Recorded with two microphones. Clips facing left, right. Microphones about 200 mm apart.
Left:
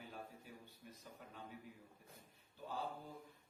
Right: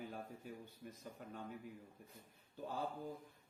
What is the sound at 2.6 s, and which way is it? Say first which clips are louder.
Speech: right 2 dB; 45° right (ahead or behind).